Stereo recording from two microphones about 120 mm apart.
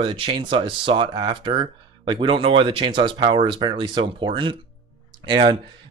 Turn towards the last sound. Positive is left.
turn(degrees=-40)  # may be behind; listen again after turning